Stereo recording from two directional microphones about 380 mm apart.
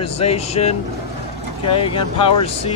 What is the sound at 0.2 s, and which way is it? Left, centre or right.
Speech, centre.